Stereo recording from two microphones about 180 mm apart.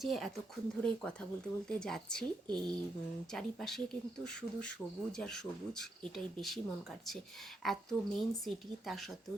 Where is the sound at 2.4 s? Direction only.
25° right (ahead or behind).